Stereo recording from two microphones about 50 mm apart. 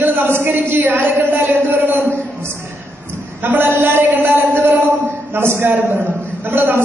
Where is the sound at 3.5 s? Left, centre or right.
Right.